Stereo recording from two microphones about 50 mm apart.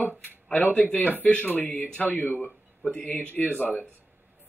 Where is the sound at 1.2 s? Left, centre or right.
Left.